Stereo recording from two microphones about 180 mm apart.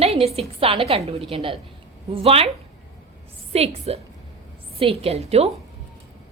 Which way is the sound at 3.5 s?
35° right (ahead or behind).